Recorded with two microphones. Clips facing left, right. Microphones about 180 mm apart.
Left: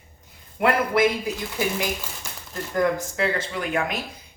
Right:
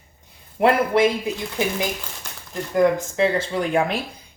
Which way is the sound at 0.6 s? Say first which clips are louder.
Right 3 dB; 30° right (ahead or behind).